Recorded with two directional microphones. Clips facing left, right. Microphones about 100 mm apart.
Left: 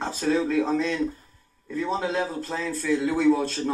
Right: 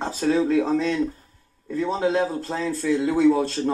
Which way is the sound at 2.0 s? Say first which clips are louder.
Right 5 dB; 25° right (ahead or behind).